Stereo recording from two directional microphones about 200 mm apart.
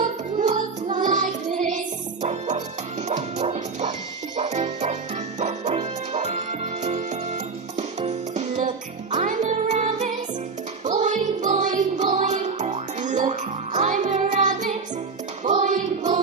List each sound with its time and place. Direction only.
0.0 s music: 40° right (ahead or behind)